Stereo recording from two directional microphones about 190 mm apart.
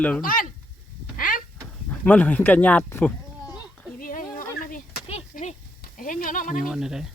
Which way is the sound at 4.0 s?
45° left (ahead or behind).